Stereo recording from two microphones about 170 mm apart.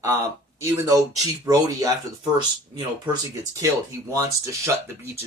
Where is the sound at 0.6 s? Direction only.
20° right (ahead or behind).